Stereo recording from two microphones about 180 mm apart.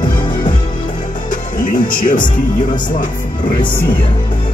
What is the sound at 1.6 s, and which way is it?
Speech, 45° left (ahead or behind).